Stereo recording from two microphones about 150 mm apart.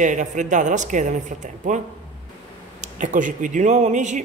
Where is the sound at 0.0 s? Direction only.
55° right (ahead or behind).